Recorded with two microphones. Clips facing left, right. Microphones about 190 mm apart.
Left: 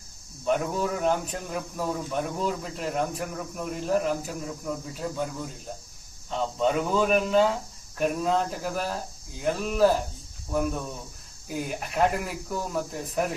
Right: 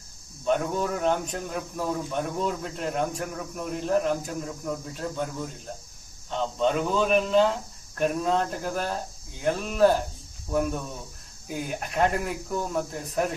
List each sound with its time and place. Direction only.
0.4 s speech: 5° left (ahead or behind)
11.4 s speech: centre (ahead or behind)